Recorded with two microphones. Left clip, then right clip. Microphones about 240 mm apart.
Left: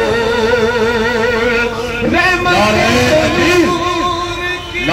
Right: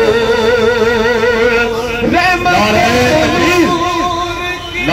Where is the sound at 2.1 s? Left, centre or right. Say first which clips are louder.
Right 1 dB; right.